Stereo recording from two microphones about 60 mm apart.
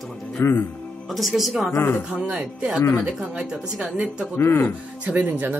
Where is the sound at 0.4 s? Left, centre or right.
Left.